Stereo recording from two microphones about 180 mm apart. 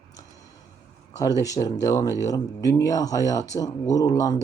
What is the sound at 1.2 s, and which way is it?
Speech, 20° left (ahead or behind).